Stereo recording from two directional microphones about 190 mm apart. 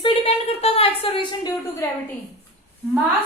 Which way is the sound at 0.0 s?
30° left (ahead or behind).